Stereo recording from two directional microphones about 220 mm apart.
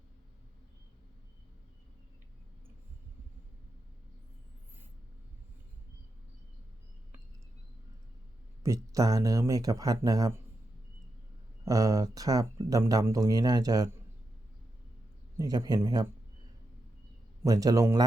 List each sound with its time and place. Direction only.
8.6 s speech: 15° right (ahead or behind)
11.6 s speech: 15° right (ahead or behind)
15.4 s speech: 15° right (ahead or behind)
17.4 s speech: 15° right (ahead or behind)